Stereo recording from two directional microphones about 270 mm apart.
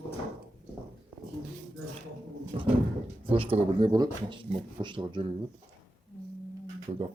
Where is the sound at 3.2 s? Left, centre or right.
Centre.